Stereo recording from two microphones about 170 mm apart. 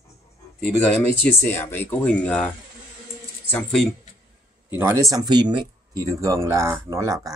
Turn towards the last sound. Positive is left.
turn(degrees=-20)  # may be behind; listen again after turning